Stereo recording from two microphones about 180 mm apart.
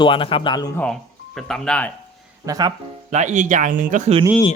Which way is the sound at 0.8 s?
5° left (ahead or behind).